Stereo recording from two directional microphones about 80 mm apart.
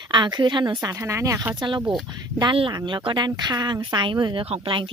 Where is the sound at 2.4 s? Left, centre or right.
Right.